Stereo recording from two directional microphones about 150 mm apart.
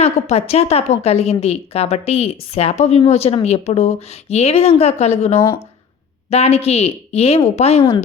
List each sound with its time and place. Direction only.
0.0 s a woman's voice: 45° left (ahead or behind)